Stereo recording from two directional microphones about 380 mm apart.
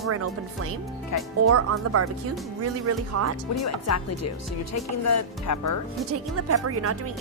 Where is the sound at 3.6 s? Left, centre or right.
Left.